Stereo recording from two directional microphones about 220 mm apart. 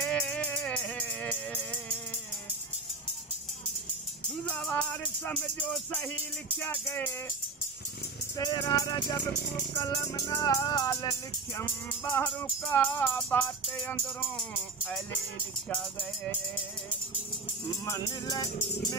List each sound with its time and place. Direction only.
0.0 s music: 5° left (ahead or behind)
4.5 s music: 5° left (ahead or behind)
8.4 s music: 15° left (ahead or behind)
17.8 s music: 15° left (ahead or behind)